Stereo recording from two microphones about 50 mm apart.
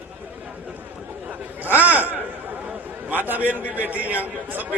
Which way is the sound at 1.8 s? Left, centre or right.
Right.